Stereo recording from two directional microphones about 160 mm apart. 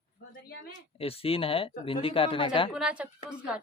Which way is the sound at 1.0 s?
35° left (ahead or behind).